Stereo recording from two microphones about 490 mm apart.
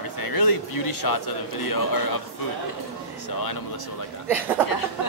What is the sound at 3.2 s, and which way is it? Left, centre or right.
Speech, left.